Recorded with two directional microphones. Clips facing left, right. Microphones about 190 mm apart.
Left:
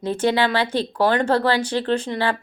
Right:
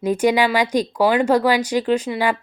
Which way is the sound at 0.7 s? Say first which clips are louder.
Right 2 dB; 10° right (ahead or behind).